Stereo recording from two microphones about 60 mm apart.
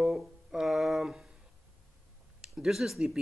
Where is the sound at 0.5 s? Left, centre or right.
Centre.